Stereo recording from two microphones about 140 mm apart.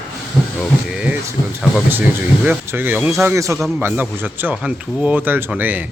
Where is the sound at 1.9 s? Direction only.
10° right (ahead or behind).